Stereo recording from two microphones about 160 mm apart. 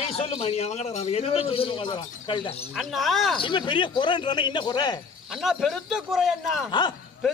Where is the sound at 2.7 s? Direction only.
Centre (ahead or behind).